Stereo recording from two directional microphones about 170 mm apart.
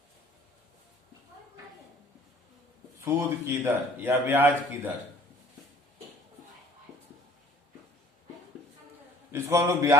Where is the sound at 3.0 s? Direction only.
15° right (ahead or behind).